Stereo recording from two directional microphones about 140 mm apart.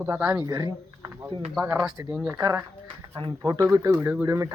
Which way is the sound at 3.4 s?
25° right (ahead or behind).